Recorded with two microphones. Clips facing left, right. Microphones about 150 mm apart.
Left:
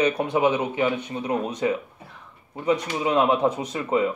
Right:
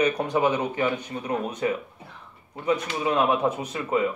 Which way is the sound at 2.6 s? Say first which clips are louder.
Left 2 dB; 25° left (ahead or behind).